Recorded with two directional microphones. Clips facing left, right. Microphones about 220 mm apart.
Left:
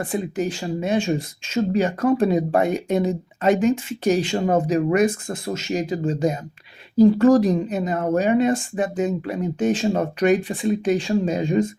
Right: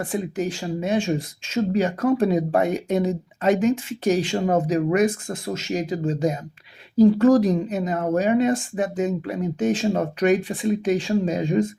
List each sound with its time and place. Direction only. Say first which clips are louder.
0.1 s speech: left 1 dB; 30° left (ahead or behind)